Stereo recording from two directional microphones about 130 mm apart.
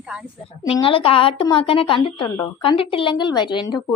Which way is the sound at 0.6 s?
40° left (ahead or behind).